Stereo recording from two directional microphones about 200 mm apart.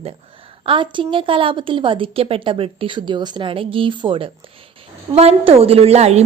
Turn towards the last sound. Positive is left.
turn(degrees=-35)  # may be behind; listen again after turning